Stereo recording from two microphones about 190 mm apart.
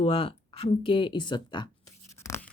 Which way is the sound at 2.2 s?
15° left (ahead or behind).